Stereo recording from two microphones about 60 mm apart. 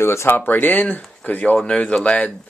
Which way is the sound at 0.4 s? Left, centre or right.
Left.